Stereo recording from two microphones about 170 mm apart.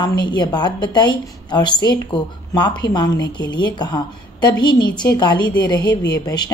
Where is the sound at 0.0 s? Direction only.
25° left (ahead or behind).